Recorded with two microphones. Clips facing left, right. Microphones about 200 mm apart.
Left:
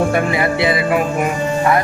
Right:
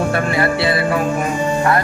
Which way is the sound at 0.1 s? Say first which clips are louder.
Left 1 dB; 15° left (ahead or behind).